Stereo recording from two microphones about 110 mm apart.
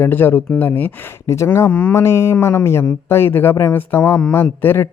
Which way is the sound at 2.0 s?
25° left (ahead or behind).